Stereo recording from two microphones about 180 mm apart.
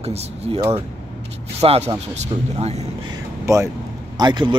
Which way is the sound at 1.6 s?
35° right (ahead or behind).